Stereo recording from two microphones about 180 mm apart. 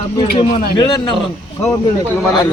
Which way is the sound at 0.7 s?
25° left (ahead or behind).